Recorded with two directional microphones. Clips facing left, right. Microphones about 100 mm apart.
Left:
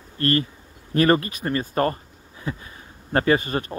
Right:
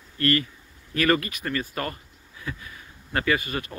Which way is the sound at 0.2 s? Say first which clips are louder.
Left 2 dB; 30° left (ahead or behind).